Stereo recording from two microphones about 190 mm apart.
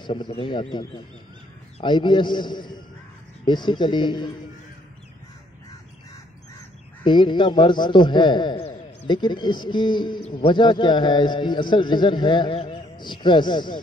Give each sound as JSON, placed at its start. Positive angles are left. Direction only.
{"t": 0.0, "sound": "a man's voice", "side_deg": 25}
{"t": 7.1, "sound": "a man's voice", "side_deg": 25}